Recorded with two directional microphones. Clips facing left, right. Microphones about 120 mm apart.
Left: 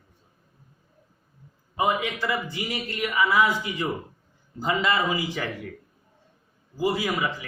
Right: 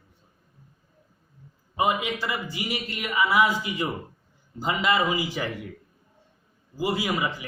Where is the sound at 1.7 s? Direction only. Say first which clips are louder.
Even; 15° right (ahead or behind).